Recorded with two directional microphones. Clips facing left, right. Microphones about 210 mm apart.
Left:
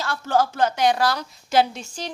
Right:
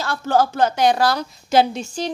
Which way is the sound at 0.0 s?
35° right (ahead or behind).